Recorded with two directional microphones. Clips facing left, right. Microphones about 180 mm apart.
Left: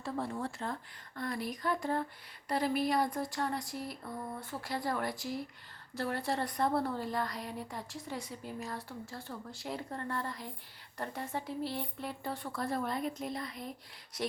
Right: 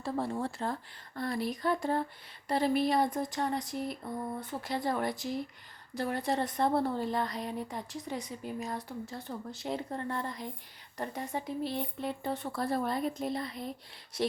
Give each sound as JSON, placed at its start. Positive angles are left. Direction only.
{"t": 0.0, "sound": "a woman's voice", "side_deg": -30}